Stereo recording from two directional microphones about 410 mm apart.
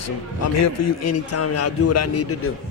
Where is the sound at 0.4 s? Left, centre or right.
Left.